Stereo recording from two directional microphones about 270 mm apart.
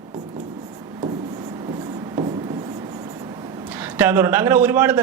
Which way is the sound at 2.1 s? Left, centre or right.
Centre.